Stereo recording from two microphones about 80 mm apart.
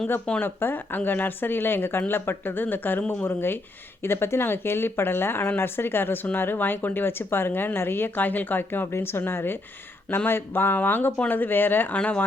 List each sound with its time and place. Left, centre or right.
0.3 s speech: left